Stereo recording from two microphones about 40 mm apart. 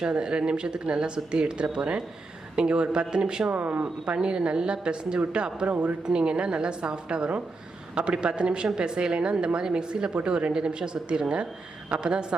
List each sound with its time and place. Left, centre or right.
0.0 s a woman's voice: right
3.5 s a woman's voice: right